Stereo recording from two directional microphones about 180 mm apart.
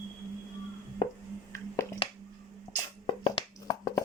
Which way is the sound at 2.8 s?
25° left (ahead or behind).